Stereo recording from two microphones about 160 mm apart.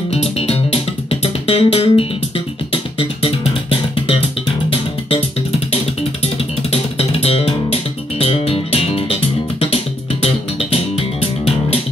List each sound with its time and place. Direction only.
0.1 s music: 40° left (ahead or behind)
6.2 s music: 40° left (ahead or behind)